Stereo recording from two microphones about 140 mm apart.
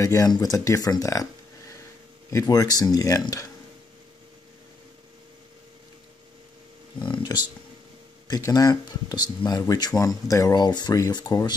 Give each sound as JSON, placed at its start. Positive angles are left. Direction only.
{"t": 0.0, "sound": "speech", "side_deg": 25}
{"t": 2.3, "sound": "speech", "side_deg": 25}
{"t": 7.0, "sound": "a sound", "side_deg": 30}
{"t": 8.3, "sound": "speech", "side_deg": 25}